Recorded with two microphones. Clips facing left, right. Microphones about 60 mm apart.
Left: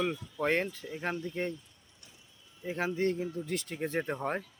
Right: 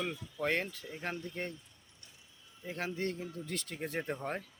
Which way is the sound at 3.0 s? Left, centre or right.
Left.